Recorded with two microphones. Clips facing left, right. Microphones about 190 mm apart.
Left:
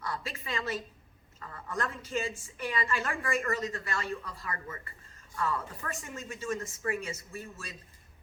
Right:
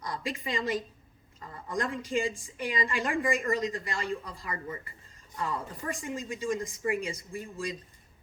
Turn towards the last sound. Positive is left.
turn(degrees=-15)  # may be behind; listen again after turning